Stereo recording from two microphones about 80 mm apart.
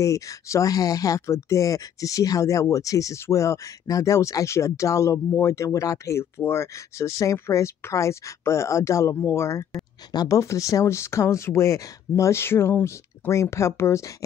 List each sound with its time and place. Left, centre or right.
0.0 s speech: left
13.3 s speech: left